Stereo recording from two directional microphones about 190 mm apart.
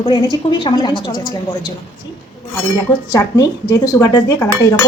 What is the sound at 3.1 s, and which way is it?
A woman's voice, 20° left (ahead or behind).